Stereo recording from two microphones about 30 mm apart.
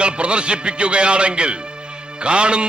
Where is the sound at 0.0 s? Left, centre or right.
Right.